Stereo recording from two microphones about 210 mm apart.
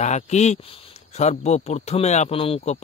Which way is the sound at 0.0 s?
35° left (ahead or behind).